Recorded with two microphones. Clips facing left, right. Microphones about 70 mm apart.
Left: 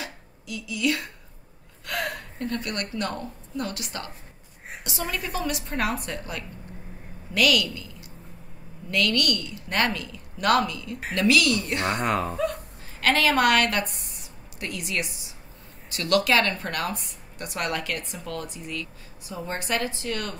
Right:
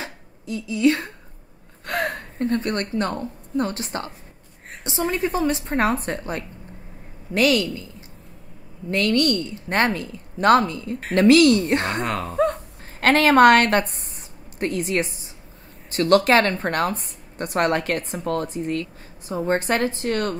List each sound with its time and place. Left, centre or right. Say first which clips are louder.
0.0 s a sound: right 3 dB; right
1.9 s a woman's voice: right 5 dB; right
8.9 s a woman's voice: right 5 dB; right
11.9 s speech: even; centre
13.0 s a woman's voice: right 7 dB; right